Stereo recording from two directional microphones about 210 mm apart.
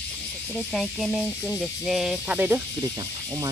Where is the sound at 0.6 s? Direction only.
Centre (ahead or behind).